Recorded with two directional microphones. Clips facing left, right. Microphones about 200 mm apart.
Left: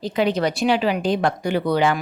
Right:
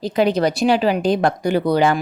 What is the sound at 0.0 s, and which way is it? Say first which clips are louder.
A woman's voice: right 3 dB; 40° right (ahead or behind).